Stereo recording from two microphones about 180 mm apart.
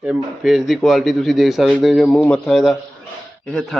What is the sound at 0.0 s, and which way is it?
Speech, 5° right (ahead or behind).